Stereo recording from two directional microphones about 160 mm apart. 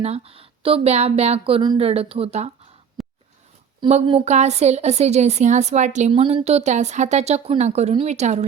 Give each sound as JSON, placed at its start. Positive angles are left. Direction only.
{"t": 0.0, "sound": "speech", "side_deg": -40}
{"t": 3.0, "sound": "a sound", "side_deg": 0}
{"t": 3.8, "sound": "a woman's voice", "side_deg": -40}